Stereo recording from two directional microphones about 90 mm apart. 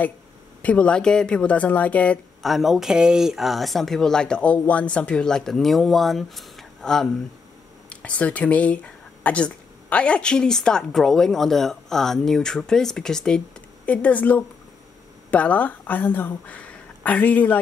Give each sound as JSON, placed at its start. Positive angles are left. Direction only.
{"t": 0.6, "sound": "speech", "side_deg": 15}
{"t": 2.4, "sound": "speech", "side_deg": 0}